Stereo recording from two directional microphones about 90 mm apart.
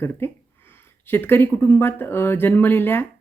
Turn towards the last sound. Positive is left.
turn(degrees=25)  # may be behind; listen again after turning